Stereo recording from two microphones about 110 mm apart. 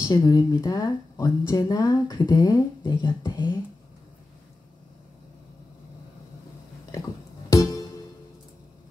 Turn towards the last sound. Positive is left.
turn(degrees=30)  # may be behind; listen again after turning